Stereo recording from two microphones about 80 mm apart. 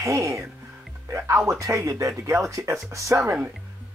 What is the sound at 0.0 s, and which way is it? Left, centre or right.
Speech, right.